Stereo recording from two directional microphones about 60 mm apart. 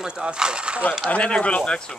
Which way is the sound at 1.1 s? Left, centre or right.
Centre.